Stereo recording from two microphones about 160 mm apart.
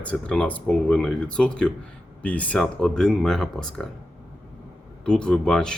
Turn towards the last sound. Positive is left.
turn(degrees=5)  # may be behind; listen again after turning